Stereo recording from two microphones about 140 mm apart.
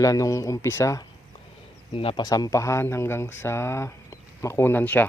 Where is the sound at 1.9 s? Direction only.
40° left (ahead or behind).